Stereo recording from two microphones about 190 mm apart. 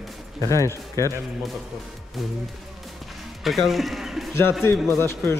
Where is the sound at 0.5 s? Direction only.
15° left (ahead or behind).